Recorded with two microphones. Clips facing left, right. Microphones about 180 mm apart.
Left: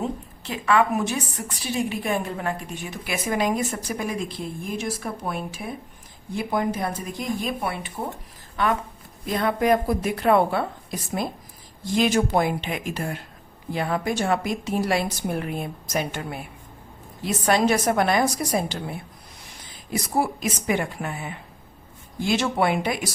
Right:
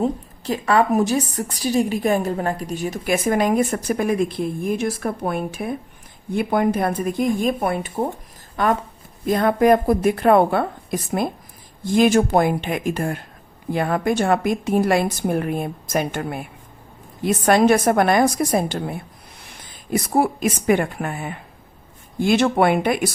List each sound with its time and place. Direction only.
0.0 s a woman's voice: 40° right (ahead or behind)
20.1 s a woman's voice: 55° right (ahead or behind)